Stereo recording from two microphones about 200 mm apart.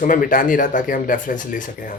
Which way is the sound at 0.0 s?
40° left (ahead or behind).